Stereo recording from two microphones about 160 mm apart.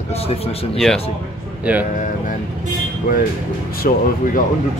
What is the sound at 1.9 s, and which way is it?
Speech, 50° left (ahead or behind).